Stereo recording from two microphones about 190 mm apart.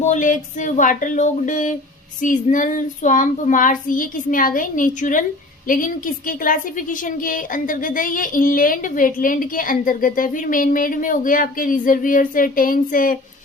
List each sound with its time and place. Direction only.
0.0 s a woman's voice: 40° left (ahead or behind)